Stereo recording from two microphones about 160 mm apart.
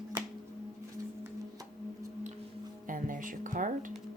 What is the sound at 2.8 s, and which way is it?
Music, 55° right (ahead or behind).